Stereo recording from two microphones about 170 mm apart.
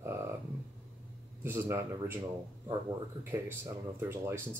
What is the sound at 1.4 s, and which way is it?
Speech, 15° right (ahead or behind).